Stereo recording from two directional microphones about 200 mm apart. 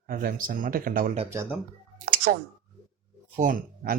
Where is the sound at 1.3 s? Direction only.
15° right (ahead or behind).